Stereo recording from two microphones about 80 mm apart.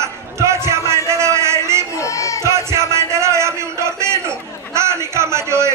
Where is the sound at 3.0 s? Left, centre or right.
Right.